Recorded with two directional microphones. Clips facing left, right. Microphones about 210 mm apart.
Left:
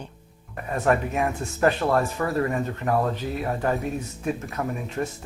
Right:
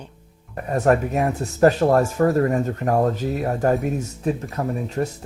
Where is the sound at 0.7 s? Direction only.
40° right (ahead or behind).